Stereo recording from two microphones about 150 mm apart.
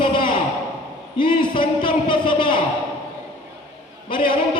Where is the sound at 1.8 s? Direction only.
35° left (ahead or behind).